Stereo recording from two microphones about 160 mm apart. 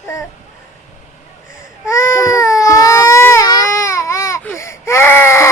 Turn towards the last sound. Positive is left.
turn(degrees=15)  # may be behind; listen again after turning